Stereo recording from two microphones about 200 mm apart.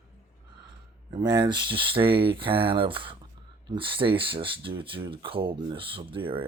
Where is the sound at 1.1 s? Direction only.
20° right (ahead or behind).